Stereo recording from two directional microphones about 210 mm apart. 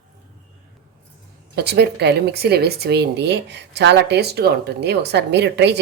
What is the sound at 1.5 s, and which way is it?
Speech, 55° right (ahead or behind).